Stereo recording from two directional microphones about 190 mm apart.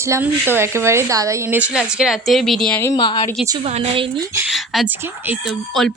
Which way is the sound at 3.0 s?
30° left (ahead or behind).